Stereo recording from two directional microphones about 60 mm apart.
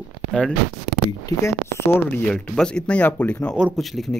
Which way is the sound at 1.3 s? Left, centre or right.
Left.